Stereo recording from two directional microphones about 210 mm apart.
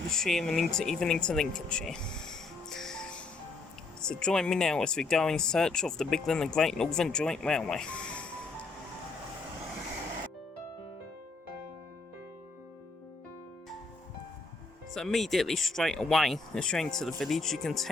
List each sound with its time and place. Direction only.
0.1 s speech: centre (ahead or behind)
14.9 s speech: centre (ahead or behind)